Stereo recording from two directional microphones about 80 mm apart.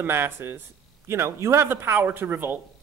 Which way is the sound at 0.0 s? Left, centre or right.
Right.